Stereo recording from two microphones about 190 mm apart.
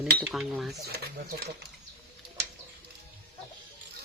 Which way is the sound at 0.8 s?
55° right (ahead or behind).